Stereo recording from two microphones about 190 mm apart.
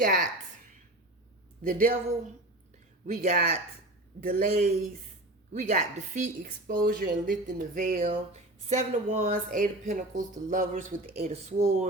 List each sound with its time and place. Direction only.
0.0 s speech: 40° right (ahead or behind)
1.6 s a woman's voice: 45° right (ahead or behind)
8.3 s speech: 35° right (ahead or behind)
9.3 s speech: 45° right (ahead or behind)